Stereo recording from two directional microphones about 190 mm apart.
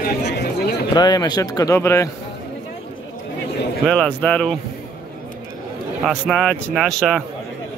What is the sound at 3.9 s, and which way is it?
Speech, 5° left (ahead or behind).